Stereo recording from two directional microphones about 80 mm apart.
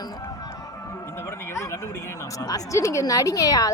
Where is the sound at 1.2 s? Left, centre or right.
Left.